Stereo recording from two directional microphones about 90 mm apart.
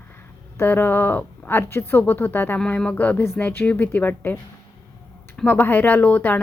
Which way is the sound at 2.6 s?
10° left (ahead or behind).